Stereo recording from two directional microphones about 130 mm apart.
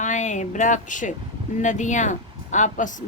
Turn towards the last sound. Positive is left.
turn(degrees=75)  # may be behind; listen again after turning